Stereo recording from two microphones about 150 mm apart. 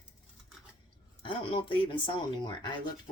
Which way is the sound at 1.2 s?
35° left (ahead or behind).